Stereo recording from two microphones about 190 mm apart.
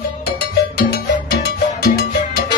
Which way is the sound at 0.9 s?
55° left (ahead or behind).